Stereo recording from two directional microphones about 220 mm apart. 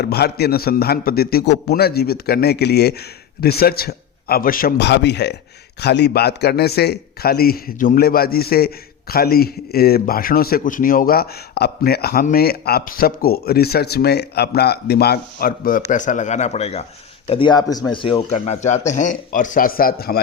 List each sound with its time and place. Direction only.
0.0 s speech: 45° left (ahead or behind)